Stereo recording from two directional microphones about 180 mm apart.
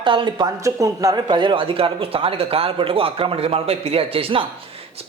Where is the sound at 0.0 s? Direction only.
30° right (ahead or behind).